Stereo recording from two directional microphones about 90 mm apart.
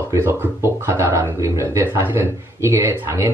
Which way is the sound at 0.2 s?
25° right (ahead or behind).